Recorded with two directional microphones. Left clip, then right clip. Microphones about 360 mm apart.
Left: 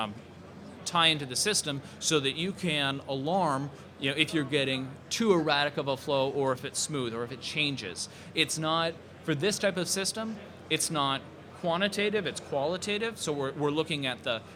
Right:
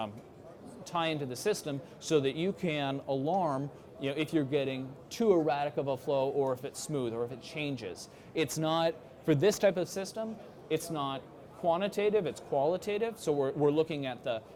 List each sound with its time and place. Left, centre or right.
0.9 s speech: right